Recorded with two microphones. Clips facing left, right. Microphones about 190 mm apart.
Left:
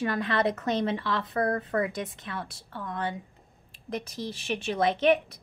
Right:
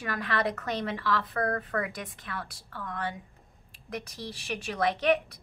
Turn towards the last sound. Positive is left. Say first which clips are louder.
# left 3 dB
turn(degrees=25)  # may be behind; listen again after turning